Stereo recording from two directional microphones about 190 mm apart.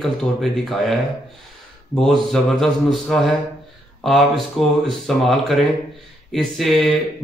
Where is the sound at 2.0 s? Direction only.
5° left (ahead or behind).